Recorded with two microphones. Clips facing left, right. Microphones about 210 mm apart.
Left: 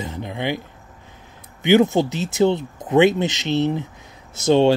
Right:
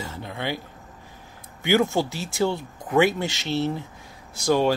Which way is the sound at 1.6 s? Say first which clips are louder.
Left 6 dB; 20° left (ahead or behind).